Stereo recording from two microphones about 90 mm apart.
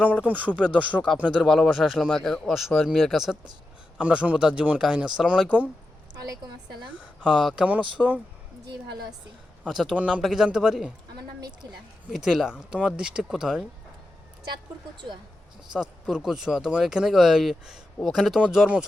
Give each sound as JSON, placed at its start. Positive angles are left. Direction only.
{"t": 0.0, "sound": "speech", "side_deg": -15}
{"t": 1.4, "sound": "speech", "side_deg": 5}
{"t": 3.9, "sound": "speech", "side_deg": -10}
{"t": 6.1, "sound": "a woman's voice", "side_deg": -50}
{"t": 7.6, "sound": "speech", "side_deg": -15}
{"t": 9.6, "sound": "speech", "side_deg": -5}
{"t": 11.3, "sound": "speech", "side_deg": -45}
{"t": 12.1, "sound": "speech", "side_deg": -5}
{"t": 15.7, "sound": "speech", "side_deg": -5}